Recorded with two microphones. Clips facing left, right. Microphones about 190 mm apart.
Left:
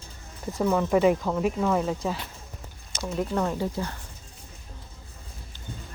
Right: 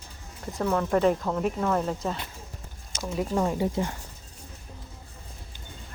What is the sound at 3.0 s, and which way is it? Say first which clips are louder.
Speech: even; 5° right (ahead or behind).